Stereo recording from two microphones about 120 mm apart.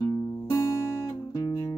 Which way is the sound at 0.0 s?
35° left (ahead or behind).